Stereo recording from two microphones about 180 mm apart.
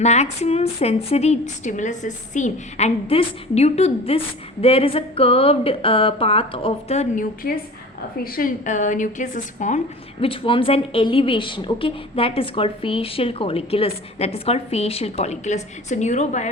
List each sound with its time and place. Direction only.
0.0 s a woman's voice: 40° left (ahead or behind)
8.2 s a woman's voice: 55° left (ahead or behind)